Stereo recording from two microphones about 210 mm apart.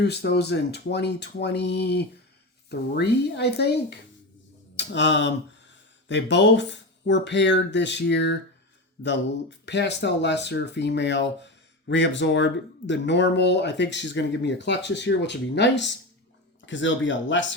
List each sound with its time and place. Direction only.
0.0 s speech: 55° left (ahead or behind)